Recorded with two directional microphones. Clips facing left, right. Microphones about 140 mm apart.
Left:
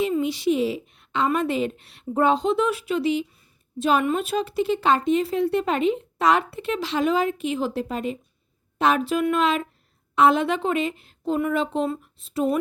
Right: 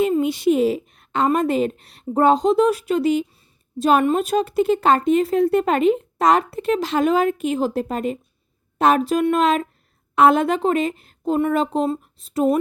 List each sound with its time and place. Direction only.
0.0 s speech: 50° right (ahead or behind)